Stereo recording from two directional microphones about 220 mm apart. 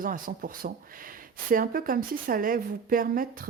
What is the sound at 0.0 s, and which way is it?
A woman's voice, 40° right (ahead or behind).